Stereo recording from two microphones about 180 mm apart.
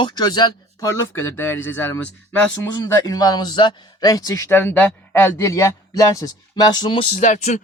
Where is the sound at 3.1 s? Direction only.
20° left (ahead or behind).